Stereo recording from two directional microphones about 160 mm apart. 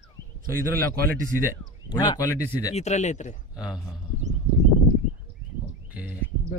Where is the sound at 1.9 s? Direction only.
25° left (ahead or behind).